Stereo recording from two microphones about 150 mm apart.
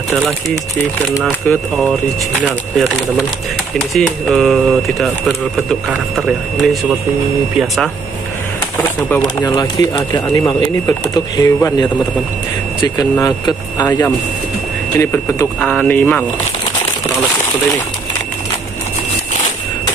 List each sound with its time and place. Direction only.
1.5 s speech: centre (ahead or behind)
3.9 s speech: centre (ahead or behind)
8.7 s speech: 10° left (ahead or behind)
9.2 s speech: 25° left (ahead or behind)
13.2 s speech: 25° left (ahead or behind); by 16.3 s 10° left (ahead or behind)